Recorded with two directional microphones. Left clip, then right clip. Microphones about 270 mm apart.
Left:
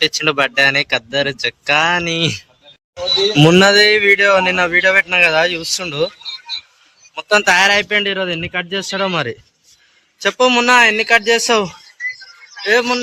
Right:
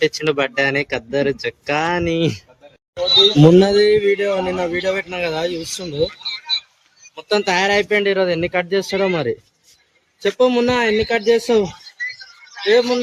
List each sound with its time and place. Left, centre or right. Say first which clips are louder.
0.0 s speech: left 3 dB; centre
3.5 s speech: left 3 dB; centre
4.2 s speech: left 7 dB; left
4.7 s speech: left 9 dB; centre
7.2 s speech: left 6 dB; centre
11.9 s music: left 3 dB; right
12.6 s speech: left 1 dB; centre